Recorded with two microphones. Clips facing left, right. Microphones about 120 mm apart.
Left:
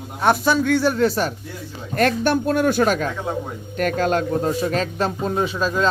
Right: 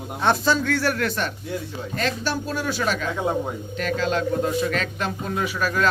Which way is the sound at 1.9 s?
55° left (ahead or behind).